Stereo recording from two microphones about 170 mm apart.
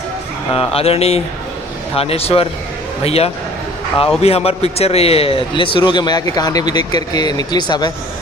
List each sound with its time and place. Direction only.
0.5 s a man's voice: 35° left (ahead or behind)